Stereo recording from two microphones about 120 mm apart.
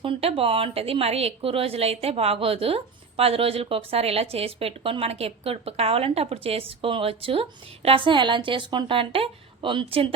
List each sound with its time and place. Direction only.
0.0 s a woman's voice: 50° right (ahead or behind)